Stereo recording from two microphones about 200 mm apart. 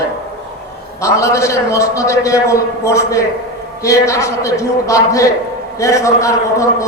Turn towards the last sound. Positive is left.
turn(degrees=15)  # may be behind; listen again after turning